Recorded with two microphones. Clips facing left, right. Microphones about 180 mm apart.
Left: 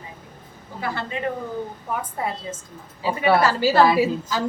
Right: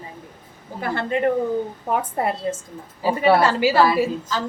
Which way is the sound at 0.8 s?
50° right (ahead or behind).